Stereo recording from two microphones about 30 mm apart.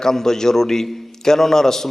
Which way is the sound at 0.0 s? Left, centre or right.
Centre.